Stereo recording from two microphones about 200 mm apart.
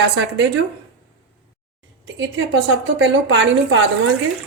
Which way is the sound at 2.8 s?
65° right (ahead or behind).